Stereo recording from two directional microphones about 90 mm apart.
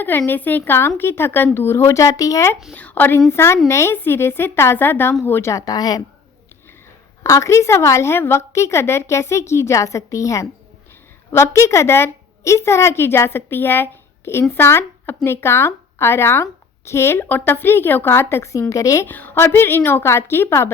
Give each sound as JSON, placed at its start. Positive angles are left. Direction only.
{"t": 0.3, "sound": "speech", "side_deg": 20}
{"t": 2.7, "sound": "a woman's voice", "side_deg": 15}
{"t": 7.2, "sound": "a woman's voice", "side_deg": 35}
{"t": 18.7, "sound": "a woman's voice", "side_deg": 35}
{"t": 19.0, "sound": "speech", "side_deg": 20}